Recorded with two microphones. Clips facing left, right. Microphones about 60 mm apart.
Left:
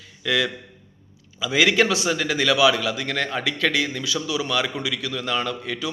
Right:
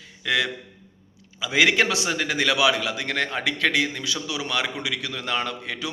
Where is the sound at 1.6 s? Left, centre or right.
Right.